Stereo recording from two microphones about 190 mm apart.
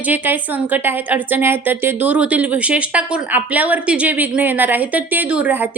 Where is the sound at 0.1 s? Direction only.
10° right (ahead or behind).